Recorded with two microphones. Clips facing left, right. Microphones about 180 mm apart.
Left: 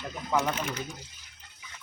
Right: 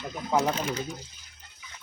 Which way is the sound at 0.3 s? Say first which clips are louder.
Right 3 dB; 35° right (ahead or behind).